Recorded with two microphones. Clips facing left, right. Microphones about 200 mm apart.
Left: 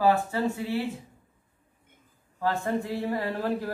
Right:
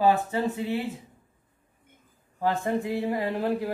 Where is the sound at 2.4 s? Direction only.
20° right (ahead or behind).